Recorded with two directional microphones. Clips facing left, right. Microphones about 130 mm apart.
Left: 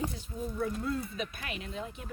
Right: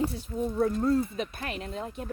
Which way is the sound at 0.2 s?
40° right (ahead or behind).